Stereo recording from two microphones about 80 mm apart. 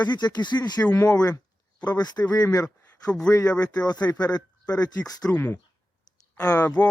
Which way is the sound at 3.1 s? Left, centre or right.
Centre.